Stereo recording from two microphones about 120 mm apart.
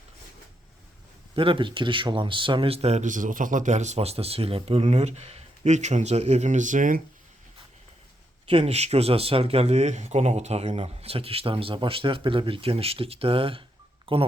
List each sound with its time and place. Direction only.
1.4 s speech: 45° right (ahead or behind); by 6.9 s 90° right
8.4 s speech: 55° right (ahead or behind)